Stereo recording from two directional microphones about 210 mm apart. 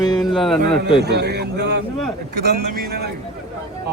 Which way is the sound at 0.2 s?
Centre (ahead or behind).